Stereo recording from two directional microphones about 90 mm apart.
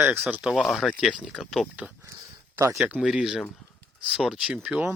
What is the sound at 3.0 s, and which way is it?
Speech, 5° right (ahead or behind).